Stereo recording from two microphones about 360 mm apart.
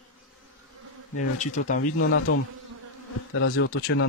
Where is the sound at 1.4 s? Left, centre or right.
Left.